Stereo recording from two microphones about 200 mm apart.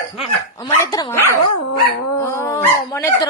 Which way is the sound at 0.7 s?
15° left (ahead or behind).